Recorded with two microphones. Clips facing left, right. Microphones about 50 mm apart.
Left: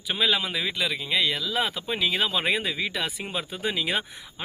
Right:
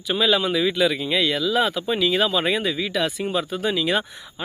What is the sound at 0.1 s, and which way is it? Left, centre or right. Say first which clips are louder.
A man's voice: right 5 dB; centre.